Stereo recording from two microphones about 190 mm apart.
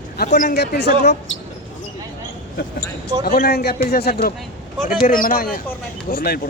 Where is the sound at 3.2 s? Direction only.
55° left (ahead or behind).